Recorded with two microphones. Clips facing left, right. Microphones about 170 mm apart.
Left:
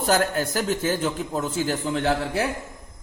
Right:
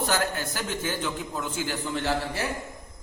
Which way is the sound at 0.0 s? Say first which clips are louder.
Left 5 dB; 45° left (ahead or behind).